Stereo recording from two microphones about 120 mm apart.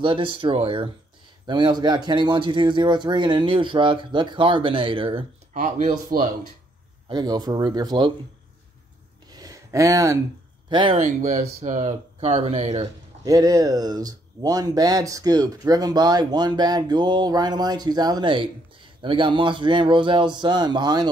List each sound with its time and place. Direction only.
0.0 s speech: 45° right (ahead or behind)
1.4 s speech: 35° right (ahead or behind)
5.5 s speech: 90° right
7.1 s speech: 35° right (ahead or behind)
9.3 s a sound: 30° right (ahead or behind)
10.7 s speech: 45° right (ahead or behind)
11.0 s speech: 90° right; by 12.8 s 60° right (ahead or behind)
13.2 s speech: 30° right (ahead or behind)